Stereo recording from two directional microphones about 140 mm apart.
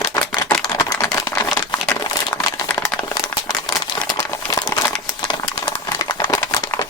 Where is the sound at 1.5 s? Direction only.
Centre (ahead or behind).